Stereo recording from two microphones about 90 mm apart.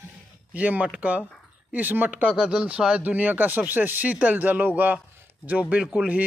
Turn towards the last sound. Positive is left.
turn(degrees=-15)  # may be behind; listen again after turning